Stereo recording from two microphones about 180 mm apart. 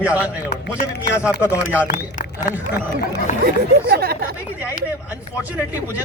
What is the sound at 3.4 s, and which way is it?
Speech, 60° right (ahead or behind).